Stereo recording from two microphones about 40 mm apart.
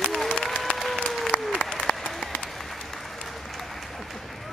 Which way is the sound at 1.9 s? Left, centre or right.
Left.